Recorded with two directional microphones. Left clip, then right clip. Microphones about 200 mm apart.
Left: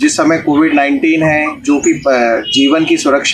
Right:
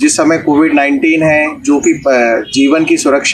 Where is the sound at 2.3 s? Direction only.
5° right (ahead or behind).